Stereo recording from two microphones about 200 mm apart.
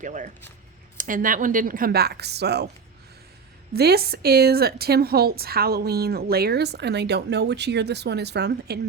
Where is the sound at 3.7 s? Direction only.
50° right (ahead or behind).